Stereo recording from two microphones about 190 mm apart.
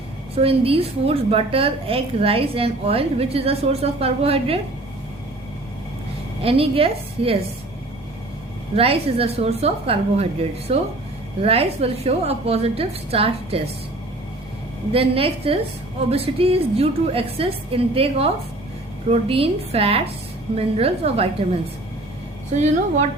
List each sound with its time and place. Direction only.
0.3 s a woman's voice: 30° right (ahead or behind)
6.4 s a woman's voice: 30° right (ahead or behind)
8.7 s a woman's voice: 30° right (ahead or behind)
14.9 s a woman's voice: 30° right (ahead or behind)